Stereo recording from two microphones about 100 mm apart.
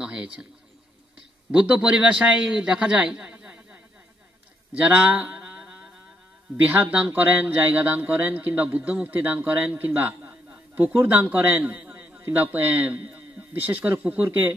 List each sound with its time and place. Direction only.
0.0 s speech: 10° right (ahead or behind)
1.6 s a man's voice: 10° right (ahead or behind)
4.7 s mantra: 15° right (ahead or behind)
6.5 s speech: 15° right (ahead or behind)